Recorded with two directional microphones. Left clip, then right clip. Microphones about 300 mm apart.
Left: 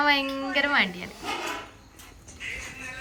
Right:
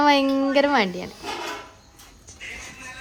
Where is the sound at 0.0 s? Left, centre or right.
Right.